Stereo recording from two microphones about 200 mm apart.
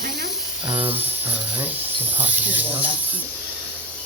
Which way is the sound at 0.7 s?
25° right (ahead or behind).